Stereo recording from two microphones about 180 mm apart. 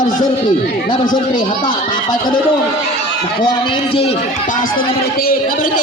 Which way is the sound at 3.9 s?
35° left (ahead or behind).